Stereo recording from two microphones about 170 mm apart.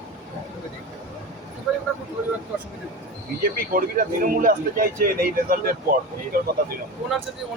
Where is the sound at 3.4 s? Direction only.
55° right (ahead or behind).